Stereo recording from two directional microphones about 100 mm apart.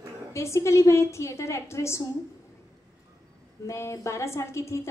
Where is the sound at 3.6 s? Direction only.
30° left (ahead or behind).